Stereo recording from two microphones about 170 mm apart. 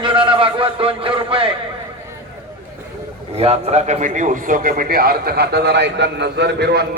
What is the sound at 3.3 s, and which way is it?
A man's voice, 35° right (ahead or behind).